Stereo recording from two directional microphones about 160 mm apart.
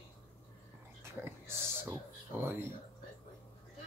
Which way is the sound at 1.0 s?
15° right (ahead or behind).